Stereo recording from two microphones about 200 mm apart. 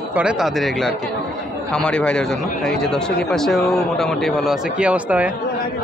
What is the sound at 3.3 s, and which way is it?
Speech, centre (ahead or behind).